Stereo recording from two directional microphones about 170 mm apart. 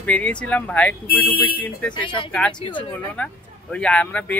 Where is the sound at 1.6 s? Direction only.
5° left (ahead or behind).